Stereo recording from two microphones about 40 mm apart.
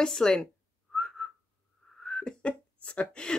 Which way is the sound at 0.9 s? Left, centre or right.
Centre.